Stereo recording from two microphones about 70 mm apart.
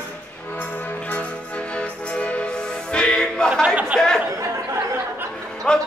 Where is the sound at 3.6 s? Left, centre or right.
Centre.